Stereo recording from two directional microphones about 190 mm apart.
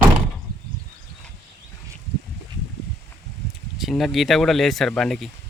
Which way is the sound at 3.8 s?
Centre (ahead or behind).